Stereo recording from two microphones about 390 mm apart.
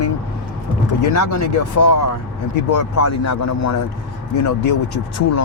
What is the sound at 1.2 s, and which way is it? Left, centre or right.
Speech, left.